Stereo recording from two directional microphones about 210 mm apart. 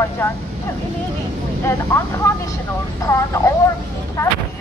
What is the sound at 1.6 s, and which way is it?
Speech, 15° left (ahead or behind).